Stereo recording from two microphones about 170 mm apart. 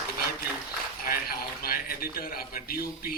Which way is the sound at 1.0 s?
60° left (ahead or behind).